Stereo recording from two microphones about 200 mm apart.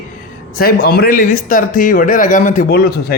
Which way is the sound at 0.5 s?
50° left (ahead or behind).